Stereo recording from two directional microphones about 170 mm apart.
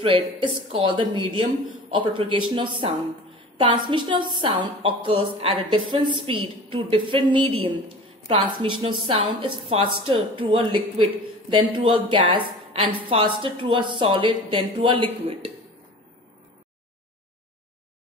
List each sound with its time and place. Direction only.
0.0 s a woman's voice: 30° right (ahead or behind)